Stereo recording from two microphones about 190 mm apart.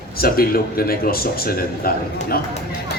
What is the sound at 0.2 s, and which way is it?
Speech, 50° left (ahead or behind).